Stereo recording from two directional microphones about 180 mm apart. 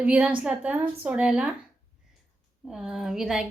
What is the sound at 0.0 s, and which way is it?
A woman's voice, 5° right (ahead or behind).